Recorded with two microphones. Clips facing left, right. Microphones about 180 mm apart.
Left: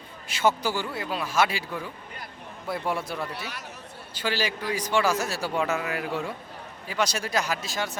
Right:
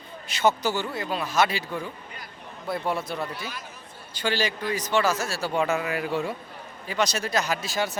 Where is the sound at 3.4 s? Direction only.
70° left (ahead or behind).